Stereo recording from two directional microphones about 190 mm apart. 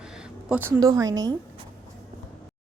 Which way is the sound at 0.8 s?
20° right (ahead or behind).